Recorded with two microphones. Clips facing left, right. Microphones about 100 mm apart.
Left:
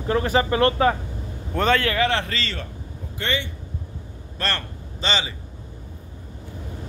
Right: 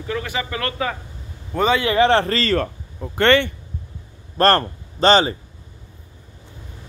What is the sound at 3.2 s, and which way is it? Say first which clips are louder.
Speech: right 12 dB; 65° right (ahead or behind).